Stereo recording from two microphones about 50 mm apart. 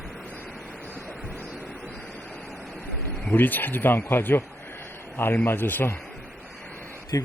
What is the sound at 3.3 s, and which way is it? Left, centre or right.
Speech, left.